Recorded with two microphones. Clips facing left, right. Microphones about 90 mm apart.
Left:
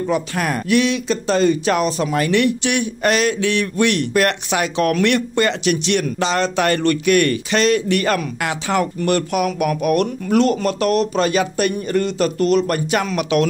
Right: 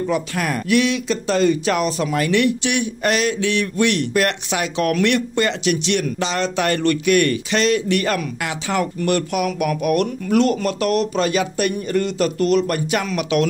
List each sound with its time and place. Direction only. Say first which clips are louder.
0.1 s speech: left 1 dB; 35° left (ahead or behind)